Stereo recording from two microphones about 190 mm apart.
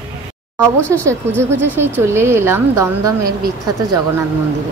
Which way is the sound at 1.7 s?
10° right (ahead or behind).